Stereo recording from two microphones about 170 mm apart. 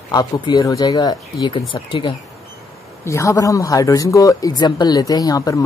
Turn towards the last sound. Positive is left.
turn(degrees=20)  # may be behind; listen again after turning